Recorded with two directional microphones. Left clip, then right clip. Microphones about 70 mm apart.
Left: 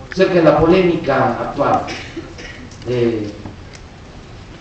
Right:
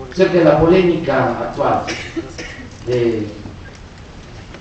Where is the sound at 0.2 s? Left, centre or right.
Centre.